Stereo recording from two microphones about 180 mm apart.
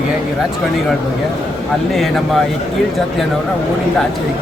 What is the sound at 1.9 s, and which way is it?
Speech, centre (ahead or behind).